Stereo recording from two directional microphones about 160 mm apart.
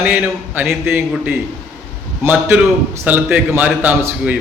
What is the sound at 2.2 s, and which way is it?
A man's voice, 15° right (ahead or behind).